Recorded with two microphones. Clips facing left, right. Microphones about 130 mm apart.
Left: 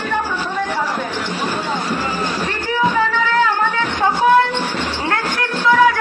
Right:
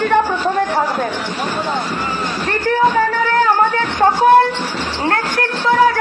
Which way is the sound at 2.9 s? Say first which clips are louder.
Right 2 dB; 40° right (ahead or behind).